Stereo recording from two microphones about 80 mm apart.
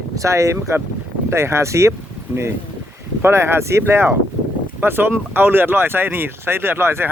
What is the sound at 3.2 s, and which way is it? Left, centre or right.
Speech, right.